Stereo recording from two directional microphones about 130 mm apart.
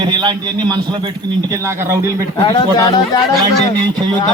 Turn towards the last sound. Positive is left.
turn(degrees=-30)  # may be behind; listen again after turning